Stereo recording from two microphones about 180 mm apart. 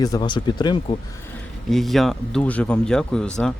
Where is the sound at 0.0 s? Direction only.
25° left (ahead or behind).